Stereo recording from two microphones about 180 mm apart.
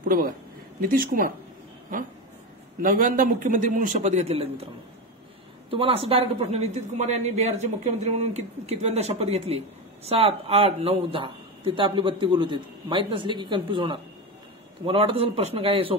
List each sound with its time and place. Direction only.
0.7 s a man's voice: 55° right (ahead or behind)
2.8 s a man's voice: 50° right (ahead or behind)
5.7 s a woman's voice: 30° right (ahead or behind)